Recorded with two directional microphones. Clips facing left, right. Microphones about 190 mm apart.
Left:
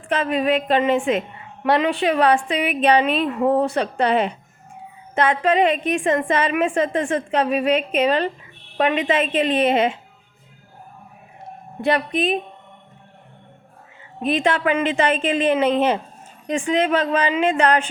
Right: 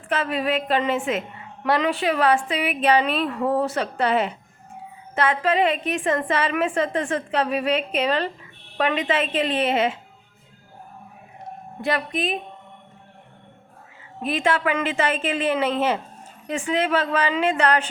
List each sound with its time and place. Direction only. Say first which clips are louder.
0.3 s a woman's voice: left 6 dB; 20° left (ahead or behind)
11.9 s a woman's voice: left 5 dB; 20° left (ahead or behind)
14.2 s a woman's voice: left 3 dB; 20° left (ahead or behind)